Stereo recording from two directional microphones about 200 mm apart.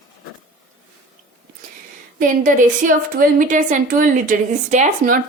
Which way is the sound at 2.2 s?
40° right (ahead or behind).